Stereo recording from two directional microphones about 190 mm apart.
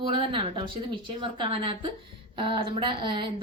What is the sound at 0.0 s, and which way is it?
A woman's voice, 25° right (ahead or behind).